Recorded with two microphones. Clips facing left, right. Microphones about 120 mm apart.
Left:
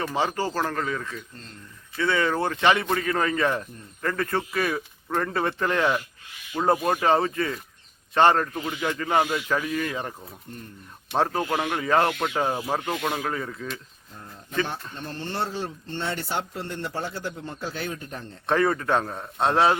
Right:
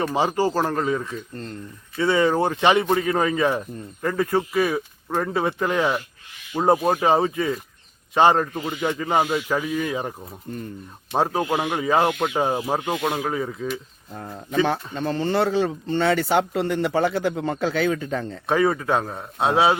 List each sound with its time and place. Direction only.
0.0 s speech: 15° right (ahead or behind)
14.1 s speech: 90° right
18.4 s a man's voice: 5° right (ahead or behind)